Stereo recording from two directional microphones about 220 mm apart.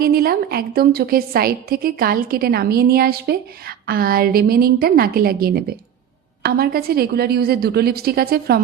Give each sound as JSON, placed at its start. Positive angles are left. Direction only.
{"t": 0.0, "sound": "a woman's voice", "side_deg": -45}